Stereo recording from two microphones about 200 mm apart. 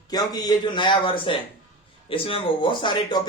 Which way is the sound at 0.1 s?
20° left (ahead or behind).